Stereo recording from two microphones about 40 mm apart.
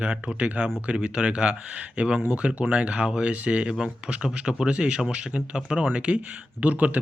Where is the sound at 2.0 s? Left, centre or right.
Right.